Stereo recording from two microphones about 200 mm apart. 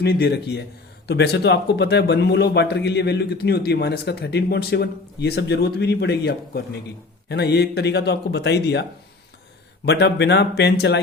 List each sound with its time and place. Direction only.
0.0 s speech: 55° left (ahead or behind)